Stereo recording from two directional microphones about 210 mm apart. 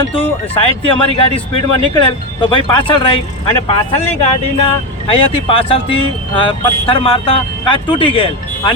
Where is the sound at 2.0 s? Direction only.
25° left (ahead or behind).